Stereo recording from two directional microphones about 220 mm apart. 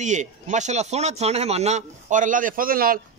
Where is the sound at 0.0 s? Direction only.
35° right (ahead or behind).